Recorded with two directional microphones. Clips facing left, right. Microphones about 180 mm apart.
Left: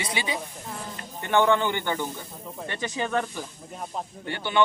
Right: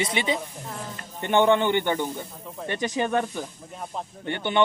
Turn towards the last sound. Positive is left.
turn(degrees=-20)  # may be behind; listen again after turning